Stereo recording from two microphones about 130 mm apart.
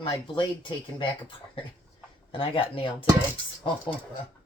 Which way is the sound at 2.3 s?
40° left (ahead or behind).